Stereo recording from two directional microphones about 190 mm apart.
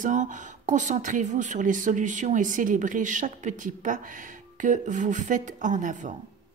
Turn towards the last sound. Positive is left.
turn(degrees=-40)  # may be behind; listen again after turning